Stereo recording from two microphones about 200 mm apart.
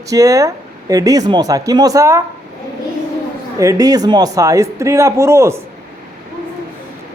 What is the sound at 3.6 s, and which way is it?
Speech, 15° right (ahead or behind).